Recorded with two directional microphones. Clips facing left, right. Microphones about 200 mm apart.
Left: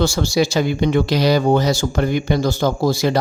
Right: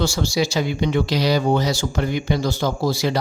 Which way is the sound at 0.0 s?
50° left (ahead or behind).